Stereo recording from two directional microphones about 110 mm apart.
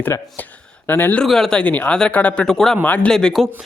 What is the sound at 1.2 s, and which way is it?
Speech, 5° left (ahead or behind).